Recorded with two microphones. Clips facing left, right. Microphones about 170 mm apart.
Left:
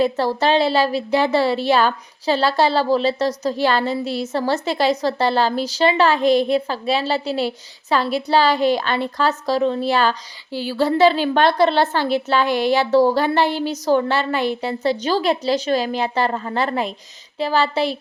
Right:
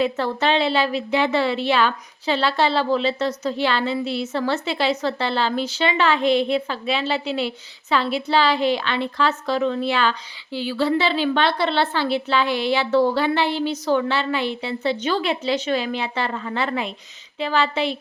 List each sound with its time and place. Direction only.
0.0 s a woman's voice: 35° left (ahead or behind)